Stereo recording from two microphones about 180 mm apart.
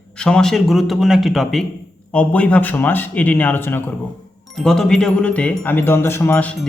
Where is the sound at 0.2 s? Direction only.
5° left (ahead or behind).